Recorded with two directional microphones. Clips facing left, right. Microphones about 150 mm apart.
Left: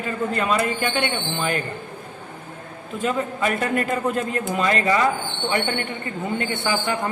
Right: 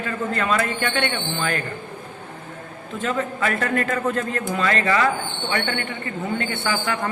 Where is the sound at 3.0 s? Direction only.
15° left (ahead or behind).